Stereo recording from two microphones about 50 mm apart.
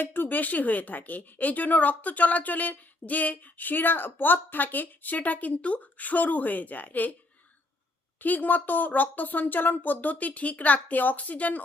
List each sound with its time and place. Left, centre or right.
0.0 s speech: left
8.2 s speech: left